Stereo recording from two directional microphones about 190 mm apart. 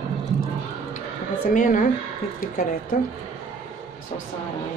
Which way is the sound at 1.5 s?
45° left (ahead or behind).